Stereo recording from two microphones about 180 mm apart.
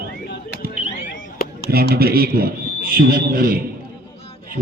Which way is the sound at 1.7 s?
60° right (ahead or behind).